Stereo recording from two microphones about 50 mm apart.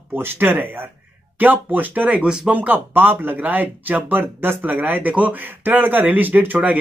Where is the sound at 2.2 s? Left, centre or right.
Centre.